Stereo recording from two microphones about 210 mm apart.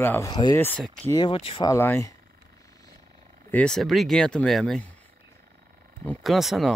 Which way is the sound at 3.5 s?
5° left (ahead or behind).